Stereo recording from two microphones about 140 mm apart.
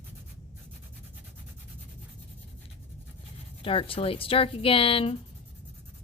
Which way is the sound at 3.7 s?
40° left (ahead or behind).